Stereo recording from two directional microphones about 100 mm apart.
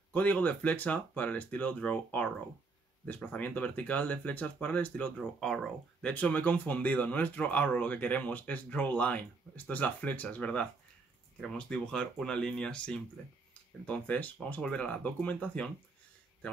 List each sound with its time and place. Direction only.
0.1 s speech: 15° left (ahead or behind)
5.1 s speech: 5° left (ahead or behind)